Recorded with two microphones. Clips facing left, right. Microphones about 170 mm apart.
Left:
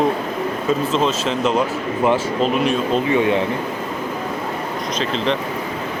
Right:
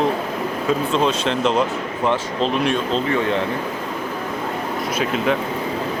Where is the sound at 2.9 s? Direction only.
15° left (ahead or behind).